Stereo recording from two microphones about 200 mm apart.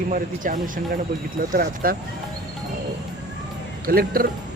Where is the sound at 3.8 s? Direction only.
45° right (ahead or behind).